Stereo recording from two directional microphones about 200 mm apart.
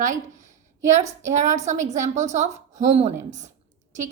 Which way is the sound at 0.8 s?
35° right (ahead or behind).